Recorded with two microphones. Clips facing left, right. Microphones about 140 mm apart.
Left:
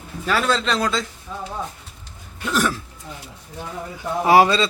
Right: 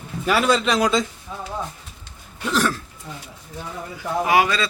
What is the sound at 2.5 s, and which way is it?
Speech, centre (ahead or behind).